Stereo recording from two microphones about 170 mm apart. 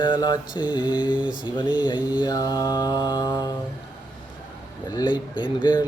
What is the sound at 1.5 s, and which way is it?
Mantra, 25° left (ahead or behind).